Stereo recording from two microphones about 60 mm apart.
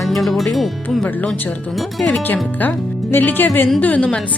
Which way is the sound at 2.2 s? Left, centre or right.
Left.